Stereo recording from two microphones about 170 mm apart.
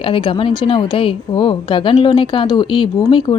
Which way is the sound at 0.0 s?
30° left (ahead or behind).